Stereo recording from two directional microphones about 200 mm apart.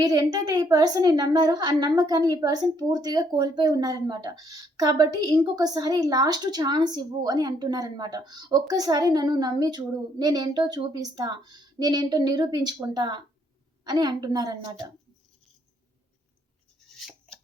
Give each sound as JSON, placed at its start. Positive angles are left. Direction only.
{"t": 0.0, "sound": "a woman's voice", "side_deg": -20}
{"t": 17.0, "sound": "chopping", "side_deg": 0}